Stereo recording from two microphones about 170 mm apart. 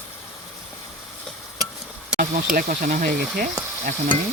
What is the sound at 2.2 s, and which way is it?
Speech, 55° right (ahead or behind).